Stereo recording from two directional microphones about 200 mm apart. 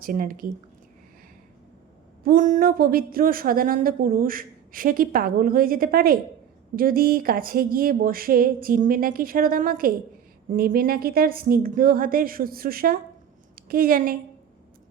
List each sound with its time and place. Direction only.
0.0 s speech: 45° right (ahead or behind)
2.2 s a woman's voice: 40° right (ahead or behind)